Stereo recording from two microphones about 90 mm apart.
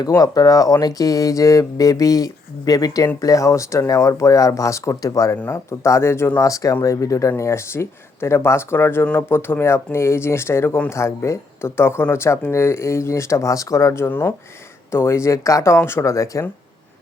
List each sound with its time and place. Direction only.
0.2 s speech: 40° left (ahead or behind)